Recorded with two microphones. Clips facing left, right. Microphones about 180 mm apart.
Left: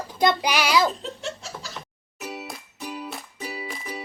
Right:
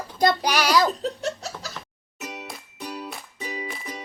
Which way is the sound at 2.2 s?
5° left (ahead or behind).